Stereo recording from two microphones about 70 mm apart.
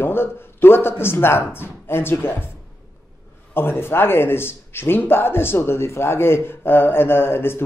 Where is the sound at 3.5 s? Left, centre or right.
Left.